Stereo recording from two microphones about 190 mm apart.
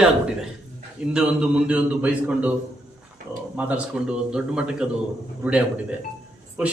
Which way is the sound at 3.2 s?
40° right (ahead or behind).